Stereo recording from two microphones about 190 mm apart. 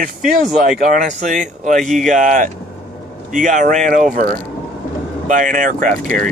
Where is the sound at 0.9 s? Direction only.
45° right (ahead or behind).